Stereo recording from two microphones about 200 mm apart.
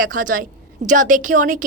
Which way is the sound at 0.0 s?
40° right (ahead or behind).